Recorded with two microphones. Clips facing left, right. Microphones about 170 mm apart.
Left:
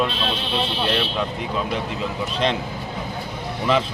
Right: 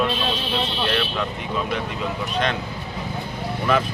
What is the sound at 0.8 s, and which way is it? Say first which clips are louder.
Speech: left 1 dB; 25° left (ahead or behind).